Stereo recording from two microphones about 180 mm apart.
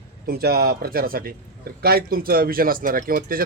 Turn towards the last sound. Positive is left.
turn(degrees=-55)  # may be behind; listen again after turning